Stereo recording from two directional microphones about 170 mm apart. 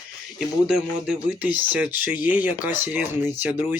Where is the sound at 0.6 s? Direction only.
5° right (ahead or behind).